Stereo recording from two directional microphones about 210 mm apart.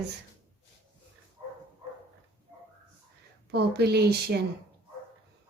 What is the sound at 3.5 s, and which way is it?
Speech, 50° right (ahead or behind).